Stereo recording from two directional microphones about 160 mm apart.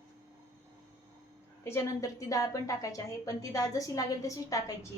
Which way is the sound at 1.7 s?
20° left (ahead or behind).